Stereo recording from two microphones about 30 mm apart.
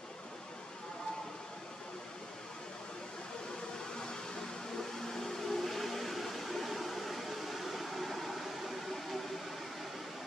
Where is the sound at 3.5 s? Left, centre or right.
Left; by 10.0 s centre.